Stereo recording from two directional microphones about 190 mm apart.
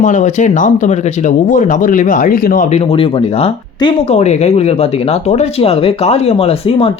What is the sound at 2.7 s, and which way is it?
Speech, 30° left (ahead or behind).